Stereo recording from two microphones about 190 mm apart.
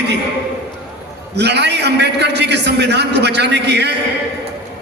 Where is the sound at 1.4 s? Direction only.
60° right (ahead or behind).